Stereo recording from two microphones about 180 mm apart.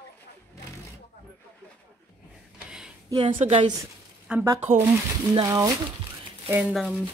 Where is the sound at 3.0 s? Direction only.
25° right (ahead or behind).